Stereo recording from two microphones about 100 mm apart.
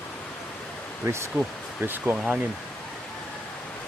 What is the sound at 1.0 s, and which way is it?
Speech, 25° right (ahead or behind).